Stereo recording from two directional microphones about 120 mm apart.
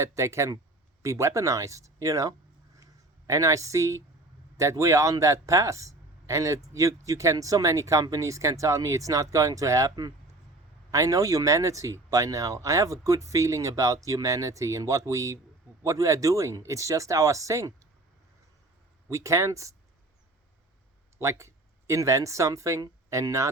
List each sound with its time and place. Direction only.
0.0 s a man's voice: 25° right (ahead or behind)
10.9 s speech: 25° right (ahead or behind)
19.0 s speech: 25° right (ahead or behind)
21.2 s speech: 25° right (ahead or behind)